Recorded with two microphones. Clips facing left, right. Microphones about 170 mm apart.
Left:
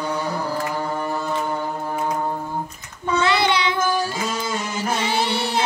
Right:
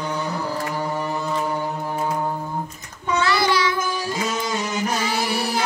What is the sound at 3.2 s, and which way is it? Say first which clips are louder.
Child singing: even; 20° left (ahead or behind).